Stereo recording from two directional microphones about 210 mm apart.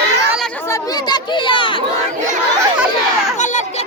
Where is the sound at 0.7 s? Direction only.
20° left (ahead or behind).